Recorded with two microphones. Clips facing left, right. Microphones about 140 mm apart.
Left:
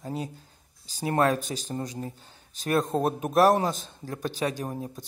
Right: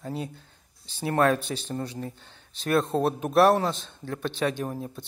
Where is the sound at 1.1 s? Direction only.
35° left (ahead or behind).